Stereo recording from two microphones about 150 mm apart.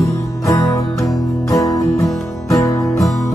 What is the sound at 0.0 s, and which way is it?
Music, 20° left (ahead or behind).